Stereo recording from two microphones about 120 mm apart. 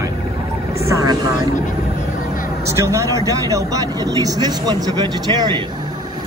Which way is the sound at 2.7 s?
25° right (ahead or behind).